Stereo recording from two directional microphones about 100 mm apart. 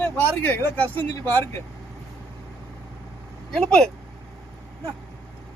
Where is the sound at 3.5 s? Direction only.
5° left (ahead or behind).